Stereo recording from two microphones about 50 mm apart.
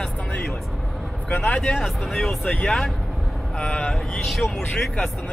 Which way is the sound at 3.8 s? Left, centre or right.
Centre.